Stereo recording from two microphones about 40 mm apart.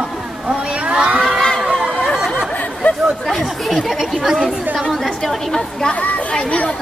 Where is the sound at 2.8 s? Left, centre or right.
Left.